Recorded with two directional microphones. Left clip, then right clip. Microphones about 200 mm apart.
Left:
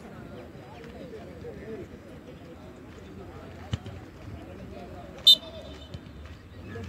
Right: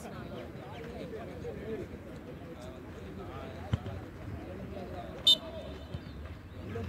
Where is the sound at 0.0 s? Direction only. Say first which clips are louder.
Right 1 dB; centre (ahead or behind).